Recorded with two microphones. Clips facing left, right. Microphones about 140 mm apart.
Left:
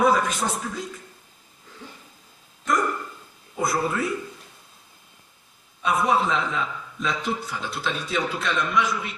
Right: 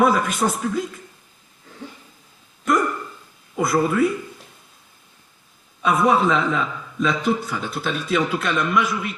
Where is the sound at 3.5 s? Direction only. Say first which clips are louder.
Right 5 dB; 60° right (ahead or behind).